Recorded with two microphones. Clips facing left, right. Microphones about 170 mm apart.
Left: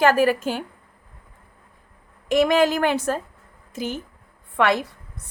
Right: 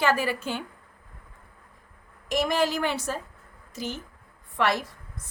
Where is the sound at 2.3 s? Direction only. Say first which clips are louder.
Left 7 dB; 60° left (ahead or behind).